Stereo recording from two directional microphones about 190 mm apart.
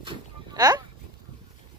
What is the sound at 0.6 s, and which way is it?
Speech, 20° right (ahead or behind).